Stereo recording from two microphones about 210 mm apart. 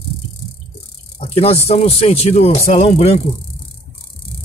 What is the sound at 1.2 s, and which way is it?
Speech, 30° left (ahead or behind).